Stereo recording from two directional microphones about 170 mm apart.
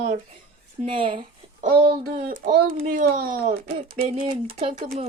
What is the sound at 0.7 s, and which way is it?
Speech, 30° right (ahead or behind).